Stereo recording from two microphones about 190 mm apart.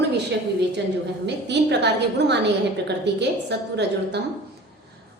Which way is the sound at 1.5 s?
65° right (ahead or behind).